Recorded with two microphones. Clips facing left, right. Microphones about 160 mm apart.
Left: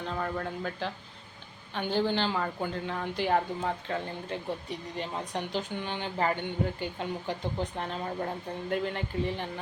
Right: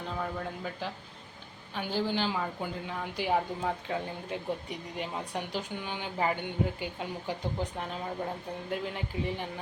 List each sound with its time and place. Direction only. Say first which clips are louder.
0.1 s a woman's voice: left 2 dB; 5° right (ahead or behind)